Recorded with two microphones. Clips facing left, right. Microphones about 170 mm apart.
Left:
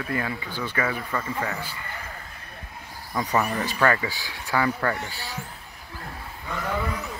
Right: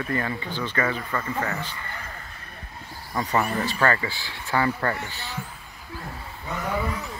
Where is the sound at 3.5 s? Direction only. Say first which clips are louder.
Even; 15° left (ahead or behind).